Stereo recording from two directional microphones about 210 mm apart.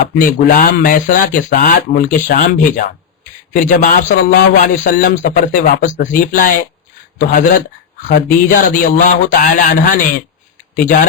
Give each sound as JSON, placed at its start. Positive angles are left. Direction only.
{"t": 0.2, "sound": "speech", "side_deg": 40}